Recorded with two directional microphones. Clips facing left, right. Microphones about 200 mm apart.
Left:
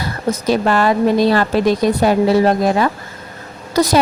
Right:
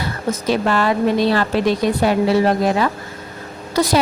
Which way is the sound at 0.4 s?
45° left (ahead or behind).